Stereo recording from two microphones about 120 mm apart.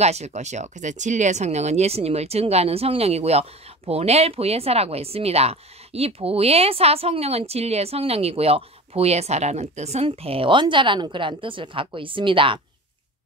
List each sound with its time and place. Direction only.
0.0 s speech: 65° right (ahead or behind); by 12.5 s 45° right (ahead or behind)